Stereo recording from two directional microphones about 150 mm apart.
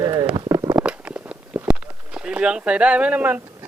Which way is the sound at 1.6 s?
10° right (ahead or behind).